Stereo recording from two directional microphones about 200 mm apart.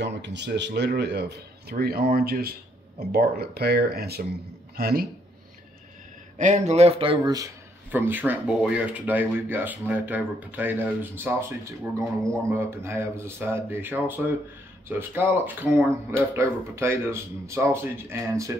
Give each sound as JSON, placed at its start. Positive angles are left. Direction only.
{"t": 0.0, "sound": "speech", "side_deg": -60}
{"t": 6.3, "sound": "speech", "side_deg": -35}